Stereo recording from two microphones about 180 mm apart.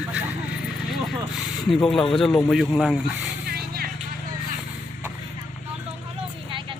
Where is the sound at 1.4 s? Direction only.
Centre (ahead or behind).